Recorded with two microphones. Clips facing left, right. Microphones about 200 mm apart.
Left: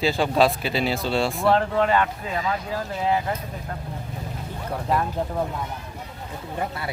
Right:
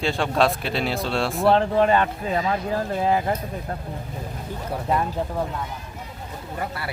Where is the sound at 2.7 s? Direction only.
50° right (ahead or behind).